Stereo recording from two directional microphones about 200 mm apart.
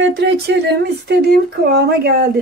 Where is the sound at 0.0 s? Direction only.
60° right (ahead or behind).